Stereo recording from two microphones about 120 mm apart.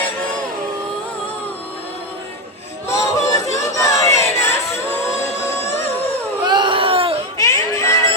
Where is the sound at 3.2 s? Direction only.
25° left (ahead or behind).